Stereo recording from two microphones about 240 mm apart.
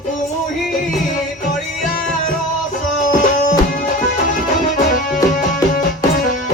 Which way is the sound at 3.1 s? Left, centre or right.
Left.